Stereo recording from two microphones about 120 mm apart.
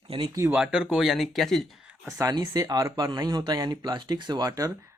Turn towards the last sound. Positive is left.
turn(degrees=-30)  # may be behind; listen again after turning